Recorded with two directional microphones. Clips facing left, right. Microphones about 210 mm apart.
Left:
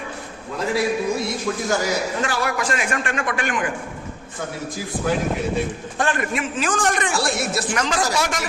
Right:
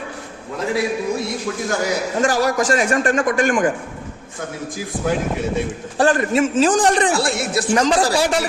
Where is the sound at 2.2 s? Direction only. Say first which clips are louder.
Right 6 dB; 40° right (ahead or behind).